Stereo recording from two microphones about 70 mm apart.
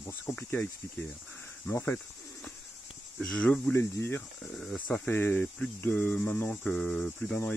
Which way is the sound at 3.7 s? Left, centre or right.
Left.